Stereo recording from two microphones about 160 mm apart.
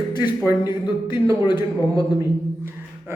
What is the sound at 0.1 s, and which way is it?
Speech, 25° left (ahead or behind).